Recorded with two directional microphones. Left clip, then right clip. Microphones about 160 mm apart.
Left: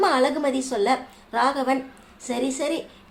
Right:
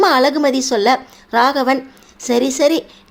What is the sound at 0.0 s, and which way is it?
A woman's voice, 40° right (ahead or behind).